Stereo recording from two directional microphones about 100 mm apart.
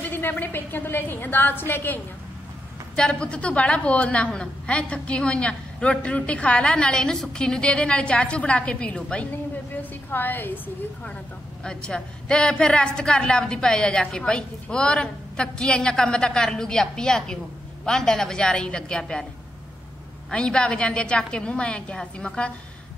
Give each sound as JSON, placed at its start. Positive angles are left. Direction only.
{"t": 0.1, "sound": "a woman's voice", "side_deg": 20}
{"t": 3.0, "sound": "a woman's voice", "side_deg": 10}
{"t": 11.6, "sound": "a woman's voice", "side_deg": 10}
{"t": 20.2, "sound": "a woman's voice", "side_deg": 10}